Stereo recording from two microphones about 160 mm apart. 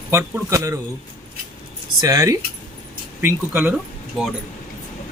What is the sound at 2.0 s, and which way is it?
A man's voice, 20° right (ahead or behind).